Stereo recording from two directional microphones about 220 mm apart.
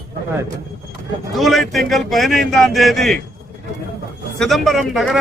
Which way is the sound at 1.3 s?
Centre (ahead or behind).